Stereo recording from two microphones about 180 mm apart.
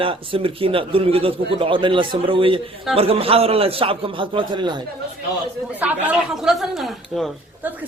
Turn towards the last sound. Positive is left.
turn(degrees=0)  # may be behind; listen again after turning